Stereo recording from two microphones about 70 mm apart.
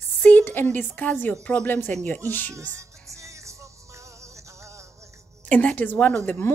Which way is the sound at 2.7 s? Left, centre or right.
Right.